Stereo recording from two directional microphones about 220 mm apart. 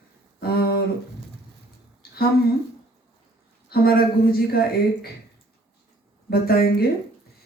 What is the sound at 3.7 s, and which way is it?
Speech, 45° left (ahead or behind).